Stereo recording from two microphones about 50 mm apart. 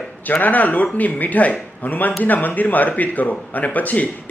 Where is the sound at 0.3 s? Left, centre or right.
Left.